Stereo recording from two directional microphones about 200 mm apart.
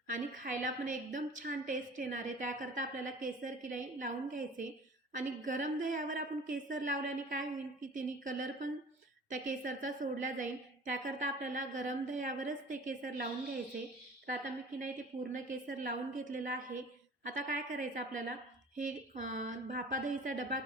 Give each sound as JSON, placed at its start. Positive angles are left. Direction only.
{"t": 0.1, "sound": "a woman's voice", "side_deg": -40}
{"t": 15.3, "sound": "a woman's voice", "side_deg": -45}